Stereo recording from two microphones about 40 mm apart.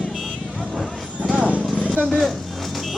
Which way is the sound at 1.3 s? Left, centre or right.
Right.